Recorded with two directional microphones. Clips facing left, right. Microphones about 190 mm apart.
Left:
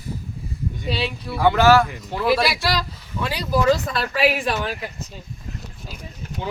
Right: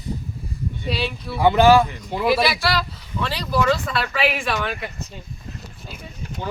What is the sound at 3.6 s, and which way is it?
Speech, 40° left (ahead or behind).